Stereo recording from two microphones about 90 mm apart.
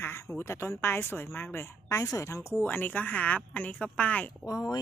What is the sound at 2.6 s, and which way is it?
Speech, 20° left (ahead or behind).